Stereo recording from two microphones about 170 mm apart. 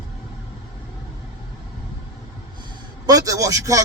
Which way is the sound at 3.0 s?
20° right (ahead or behind).